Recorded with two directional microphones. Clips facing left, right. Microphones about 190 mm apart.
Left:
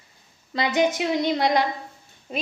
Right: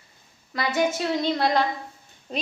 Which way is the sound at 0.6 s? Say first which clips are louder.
Left 2 dB; 15° left (ahead or behind).